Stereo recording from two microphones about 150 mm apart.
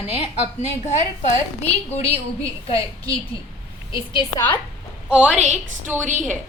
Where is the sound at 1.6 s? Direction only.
45° left (ahead or behind).